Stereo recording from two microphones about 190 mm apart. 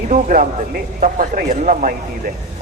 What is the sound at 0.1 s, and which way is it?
A man's voice, 45° right (ahead or behind).